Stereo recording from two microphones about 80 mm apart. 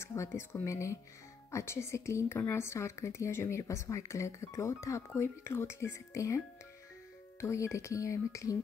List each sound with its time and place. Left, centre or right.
0.0 s speech: left